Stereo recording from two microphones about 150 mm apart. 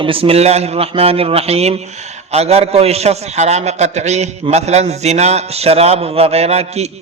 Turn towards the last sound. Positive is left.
turn(degrees=-45)  # may be behind; listen again after turning